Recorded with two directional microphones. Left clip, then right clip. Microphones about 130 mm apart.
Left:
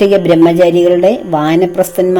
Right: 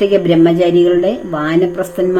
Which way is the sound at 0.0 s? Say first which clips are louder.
Left 3 dB; 45° left (ahead or behind).